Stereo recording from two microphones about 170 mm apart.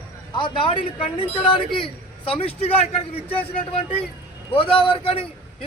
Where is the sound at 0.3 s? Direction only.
30° left (ahead or behind).